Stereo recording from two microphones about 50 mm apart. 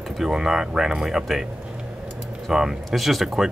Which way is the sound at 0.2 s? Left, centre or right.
Centre.